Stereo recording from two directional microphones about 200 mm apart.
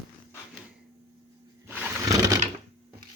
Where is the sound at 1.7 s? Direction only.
10° right (ahead or behind).